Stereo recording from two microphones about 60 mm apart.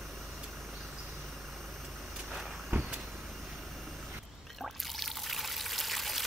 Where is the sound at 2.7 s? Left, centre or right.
Right.